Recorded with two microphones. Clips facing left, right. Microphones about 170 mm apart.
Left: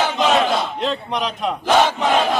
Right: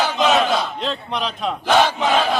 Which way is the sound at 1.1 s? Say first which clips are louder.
Left 1 dB; 15° left (ahead or behind).